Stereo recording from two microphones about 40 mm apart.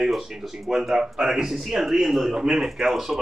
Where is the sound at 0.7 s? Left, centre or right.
Centre.